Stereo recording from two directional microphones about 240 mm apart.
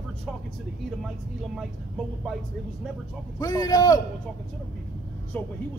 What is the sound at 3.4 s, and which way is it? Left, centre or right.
Speech, centre.